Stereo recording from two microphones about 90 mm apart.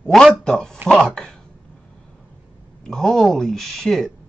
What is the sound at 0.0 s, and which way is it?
Speech, 5° left (ahead or behind).